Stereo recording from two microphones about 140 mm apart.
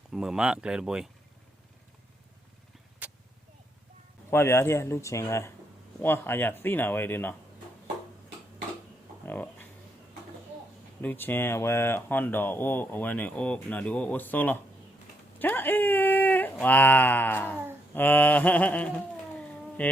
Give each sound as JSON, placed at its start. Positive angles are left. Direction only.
{"t": 0.1, "sound": "speech", "side_deg": -5}
{"t": 3.0, "sound": "a sound", "side_deg": -10}
{"t": 4.3, "sound": "speech", "side_deg": 20}
{"t": 9.2, "sound": "a sound", "side_deg": 15}
{"t": 11.0, "sound": "speech", "side_deg": 15}
{"t": 19.4, "sound": "cat", "side_deg": 10}